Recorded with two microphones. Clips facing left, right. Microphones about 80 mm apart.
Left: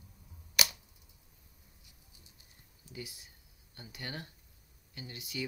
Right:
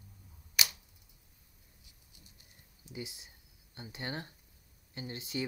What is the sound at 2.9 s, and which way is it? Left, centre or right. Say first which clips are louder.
Speech: right 2 dB; right.